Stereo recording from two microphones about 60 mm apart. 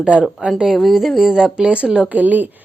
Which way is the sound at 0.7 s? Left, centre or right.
Centre.